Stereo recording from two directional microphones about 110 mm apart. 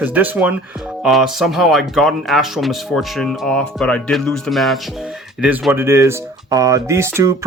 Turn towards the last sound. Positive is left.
turn(degrees=-25)  # may be behind; listen again after turning